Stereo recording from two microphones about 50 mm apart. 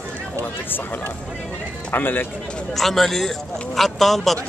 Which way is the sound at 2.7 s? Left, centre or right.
Centre.